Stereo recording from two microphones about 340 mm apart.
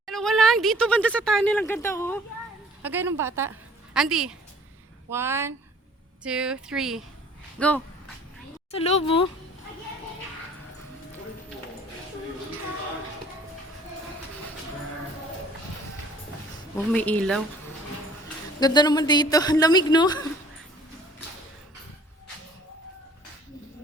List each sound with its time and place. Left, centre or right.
0.0 s speech: centre
2.8 s a woman's voice: centre
8.7 s a woman's voice: centre
16.7 s speech: centre
18.6 s a woman's voice: centre